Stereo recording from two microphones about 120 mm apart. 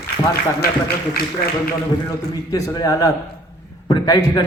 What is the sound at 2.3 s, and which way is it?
A man's voice, 30° left (ahead or behind).